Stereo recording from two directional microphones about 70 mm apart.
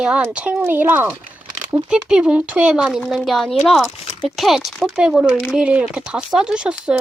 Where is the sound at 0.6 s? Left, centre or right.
Right.